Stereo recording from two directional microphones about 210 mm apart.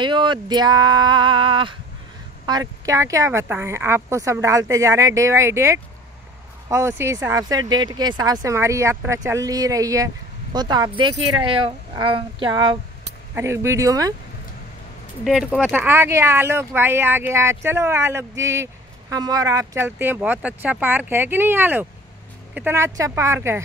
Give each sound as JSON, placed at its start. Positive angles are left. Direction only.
{"t": 0.0, "sound": "speech", "side_deg": -20}
{"t": 15.2, "sound": "speech", "side_deg": 0}